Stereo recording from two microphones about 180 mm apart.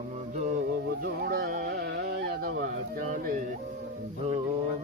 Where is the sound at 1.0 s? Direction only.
60° right (ahead or behind).